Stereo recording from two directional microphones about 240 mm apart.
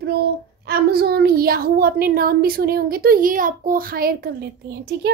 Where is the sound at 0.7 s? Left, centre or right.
Right.